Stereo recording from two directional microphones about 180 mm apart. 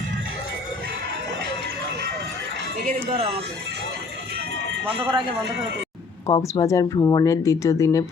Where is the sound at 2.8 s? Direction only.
35° right (ahead or behind).